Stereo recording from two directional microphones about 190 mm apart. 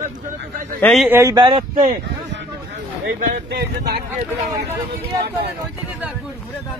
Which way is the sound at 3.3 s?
60° right (ahead or behind).